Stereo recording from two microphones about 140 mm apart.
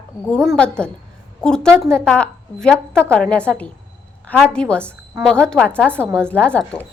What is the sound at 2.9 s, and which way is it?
Speech, 15° right (ahead or behind).